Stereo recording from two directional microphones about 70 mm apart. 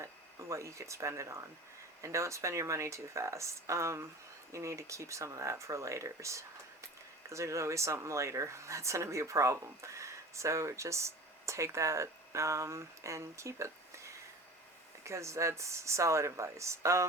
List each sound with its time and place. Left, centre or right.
0.0 s speech: right
15.0 s speech: right